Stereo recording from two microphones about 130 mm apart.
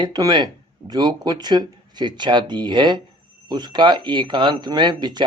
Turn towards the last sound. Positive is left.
turn(degrees=-35)  # may be behind; listen again after turning